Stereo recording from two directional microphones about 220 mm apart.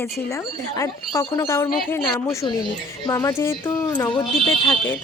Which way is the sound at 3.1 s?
15° left (ahead or behind).